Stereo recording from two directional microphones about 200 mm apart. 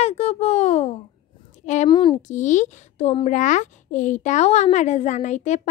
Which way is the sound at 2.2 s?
40° left (ahead or behind).